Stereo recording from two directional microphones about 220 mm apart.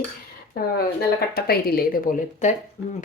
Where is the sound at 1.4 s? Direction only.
45° left (ahead or behind).